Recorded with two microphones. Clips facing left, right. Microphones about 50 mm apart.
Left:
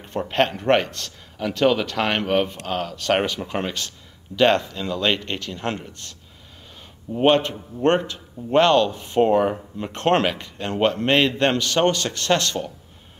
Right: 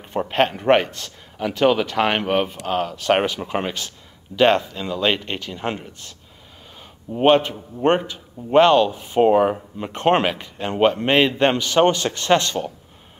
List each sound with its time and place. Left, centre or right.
0.0 s a man's voice: centre